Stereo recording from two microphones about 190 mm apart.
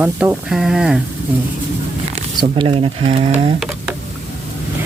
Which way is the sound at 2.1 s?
25° right (ahead or behind).